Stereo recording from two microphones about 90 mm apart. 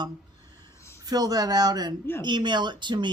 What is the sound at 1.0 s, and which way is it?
Speech, 45° right (ahead or behind).